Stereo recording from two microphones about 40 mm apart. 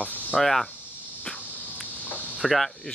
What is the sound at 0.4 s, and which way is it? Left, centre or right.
Speech, centre.